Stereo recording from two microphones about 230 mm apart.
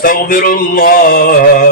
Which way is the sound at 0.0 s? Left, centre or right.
Left.